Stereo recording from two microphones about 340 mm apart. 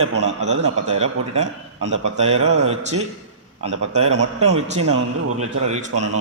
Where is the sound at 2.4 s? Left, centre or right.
Right.